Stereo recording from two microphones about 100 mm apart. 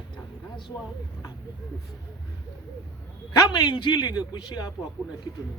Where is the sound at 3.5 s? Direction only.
45° left (ahead or behind).